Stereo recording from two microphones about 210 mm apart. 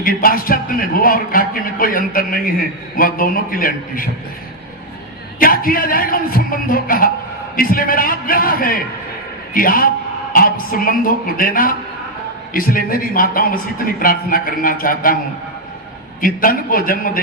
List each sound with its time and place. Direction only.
0.0 s a man's voice: 40° left (ahead or behind)
5.4 s a man's voice: 45° left (ahead or behind)
16.2 s a man's voice: 40° left (ahead or behind)